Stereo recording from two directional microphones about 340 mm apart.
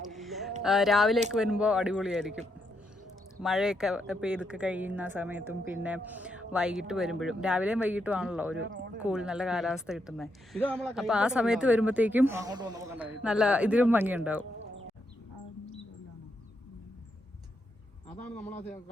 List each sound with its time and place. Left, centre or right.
0.1 s a sound: centre
0.6 s speech: centre
3.4 s speech: centre
8.5 s speech: right
9.0 s speech: centre
18.3 s speech: centre